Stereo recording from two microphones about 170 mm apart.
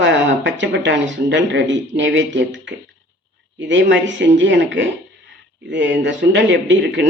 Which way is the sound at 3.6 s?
90° right.